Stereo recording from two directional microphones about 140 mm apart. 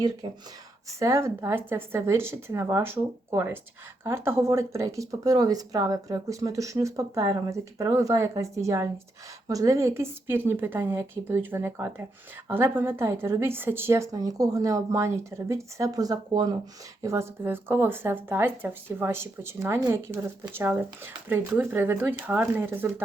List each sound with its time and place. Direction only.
0.2 s speech: 30° right (ahead or behind)
0.9 s speech: 20° right (ahead or behind)